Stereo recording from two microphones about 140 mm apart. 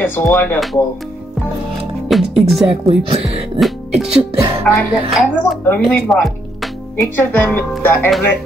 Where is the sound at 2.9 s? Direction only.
45° right (ahead or behind).